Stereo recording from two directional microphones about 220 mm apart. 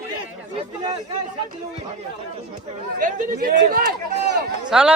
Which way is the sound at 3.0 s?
35° right (ahead or behind).